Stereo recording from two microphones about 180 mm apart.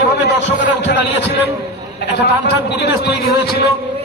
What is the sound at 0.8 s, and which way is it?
A man's voice, 75° left (ahead or behind).